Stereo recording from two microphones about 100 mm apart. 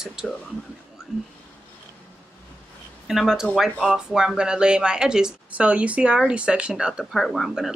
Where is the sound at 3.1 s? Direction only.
5° right (ahead or behind).